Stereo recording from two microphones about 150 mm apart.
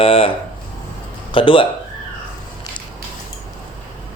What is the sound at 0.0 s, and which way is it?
Speech, 40° left (ahead or behind).